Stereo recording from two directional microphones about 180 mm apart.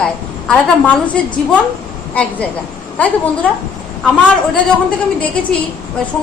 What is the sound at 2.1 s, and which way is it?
A woman's voice, 5° left (ahead or behind).